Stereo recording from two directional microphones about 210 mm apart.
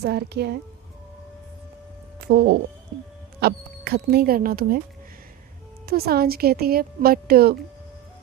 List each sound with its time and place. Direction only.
0.0 s speech: 50° right (ahead or behind)
2.2 s speech: 50° right (ahead or behind)
5.8 s speech: 45° right (ahead or behind)